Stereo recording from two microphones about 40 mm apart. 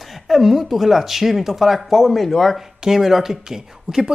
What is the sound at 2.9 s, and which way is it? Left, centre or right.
Speech, centre.